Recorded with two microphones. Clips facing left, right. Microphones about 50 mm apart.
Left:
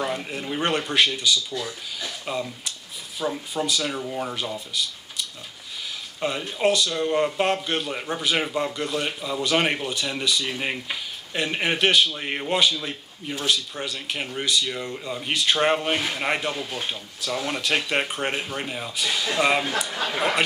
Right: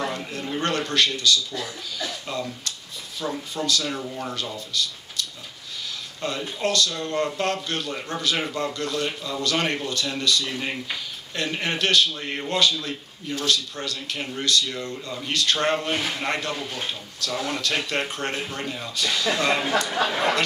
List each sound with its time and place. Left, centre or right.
0.0 s a man's voice: centre
6.2 s a man's voice: centre